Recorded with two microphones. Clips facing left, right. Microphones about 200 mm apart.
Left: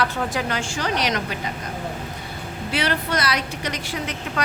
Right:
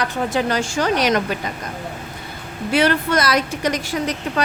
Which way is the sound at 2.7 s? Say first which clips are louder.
Right 7 dB; 50° right (ahead or behind).